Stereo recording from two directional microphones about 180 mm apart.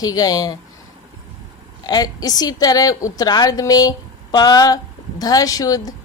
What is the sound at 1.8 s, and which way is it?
A woman's voice, 20° left (ahead or behind).